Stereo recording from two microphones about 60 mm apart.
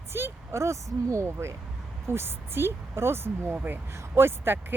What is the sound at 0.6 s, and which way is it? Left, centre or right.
Speech, right.